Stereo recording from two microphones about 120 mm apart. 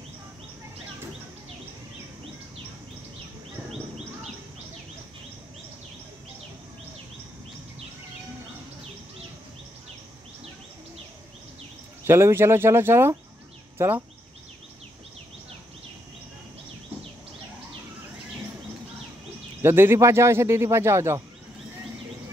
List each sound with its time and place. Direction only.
12.1 s speech: 20° right (ahead or behind)
19.6 s speech: 20° right (ahead or behind)